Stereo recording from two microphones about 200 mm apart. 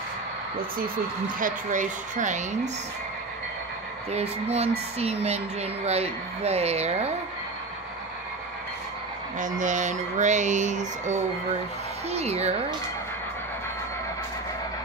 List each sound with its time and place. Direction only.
0.6 s speech: 45° right (ahead or behind)
4.1 s speech: 30° right (ahead or behind)
9.6 s speech: 40° right (ahead or behind)